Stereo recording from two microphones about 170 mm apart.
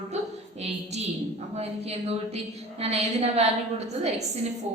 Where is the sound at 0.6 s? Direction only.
40° right (ahead or behind).